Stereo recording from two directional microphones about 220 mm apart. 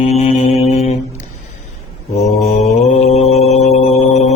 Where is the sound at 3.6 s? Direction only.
30° left (ahead or behind).